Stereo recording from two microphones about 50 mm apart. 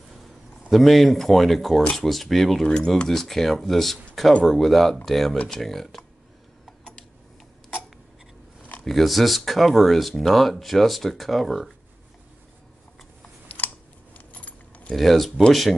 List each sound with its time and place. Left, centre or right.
0.7 s speech: centre
8.8 s speech: centre
13.6 s a sound: left
14.1 s keys jangling: left
15.0 s speech: centre